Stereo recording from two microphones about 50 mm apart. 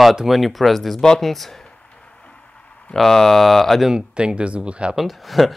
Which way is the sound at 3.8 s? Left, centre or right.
Centre.